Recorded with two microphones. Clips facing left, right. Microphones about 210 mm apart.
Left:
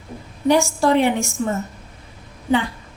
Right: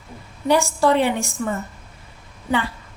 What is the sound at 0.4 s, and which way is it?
Speech, 15° left (ahead or behind).